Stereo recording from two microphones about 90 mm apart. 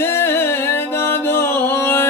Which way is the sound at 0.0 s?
25° left (ahead or behind).